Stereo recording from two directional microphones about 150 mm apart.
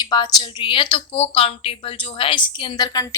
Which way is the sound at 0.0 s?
30° left (ahead or behind).